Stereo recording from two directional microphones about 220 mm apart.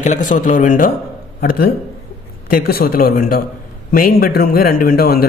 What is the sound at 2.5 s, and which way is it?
A man's voice, 40° left (ahead or behind).